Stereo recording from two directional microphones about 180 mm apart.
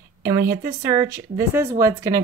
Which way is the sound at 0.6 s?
15° right (ahead or behind).